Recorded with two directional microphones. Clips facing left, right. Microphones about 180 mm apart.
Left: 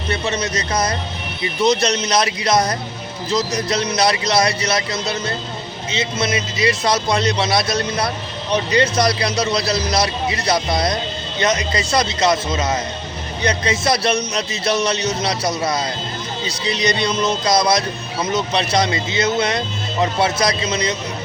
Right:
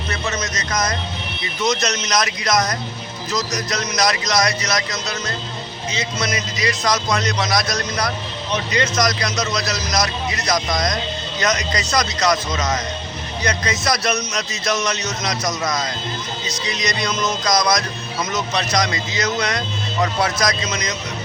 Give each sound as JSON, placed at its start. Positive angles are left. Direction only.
{"t": 0.1, "sound": "a man's voice", "side_deg": 30}